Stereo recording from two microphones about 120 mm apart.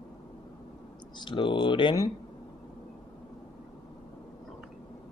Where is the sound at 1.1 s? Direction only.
40° left (ahead or behind).